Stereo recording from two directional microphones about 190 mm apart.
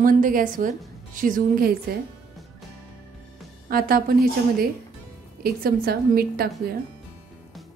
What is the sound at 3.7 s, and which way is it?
Speech, 50° right (ahead or behind).